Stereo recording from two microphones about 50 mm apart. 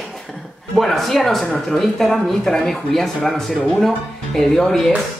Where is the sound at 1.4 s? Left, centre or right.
Left.